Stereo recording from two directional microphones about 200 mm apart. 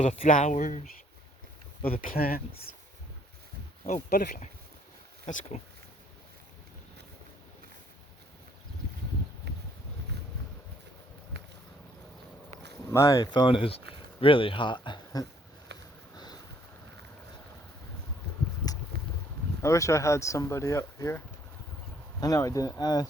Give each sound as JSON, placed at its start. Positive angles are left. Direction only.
{"t": 0.0, "sound": "speech", "side_deg": 40}
{"t": 1.9, "sound": "speech", "side_deg": 45}
{"t": 3.8, "sound": "speech", "side_deg": 35}
{"t": 5.2, "sound": "speech", "side_deg": 35}
{"t": 12.9, "sound": "speech", "side_deg": 15}
{"t": 15.7, "sound": "a sound", "side_deg": -60}
{"t": 16.1, "sound": "a sound", "side_deg": 20}
{"t": 18.9, "sound": "a sound", "side_deg": -50}
{"t": 19.6, "sound": "speech", "side_deg": 15}
{"t": 22.2, "sound": "speech", "side_deg": 15}